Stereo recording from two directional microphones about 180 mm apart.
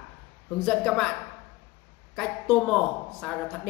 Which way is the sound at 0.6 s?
Centre (ahead or behind).